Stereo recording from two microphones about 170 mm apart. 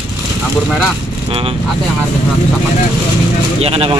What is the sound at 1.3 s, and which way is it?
Speech, 35° right (ahead or behind).